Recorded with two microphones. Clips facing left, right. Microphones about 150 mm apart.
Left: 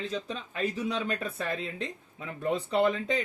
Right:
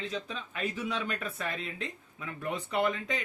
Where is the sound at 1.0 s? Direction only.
30° left (ahead or behind).